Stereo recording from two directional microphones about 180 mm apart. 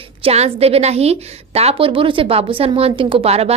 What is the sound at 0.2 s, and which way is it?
A woman's voice, 35° right (ahead or behind).